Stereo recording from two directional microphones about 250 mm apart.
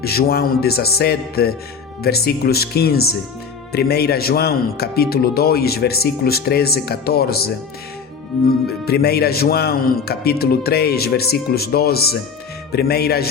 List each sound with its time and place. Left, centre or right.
0.0 s speech: left
8.8 s speech: left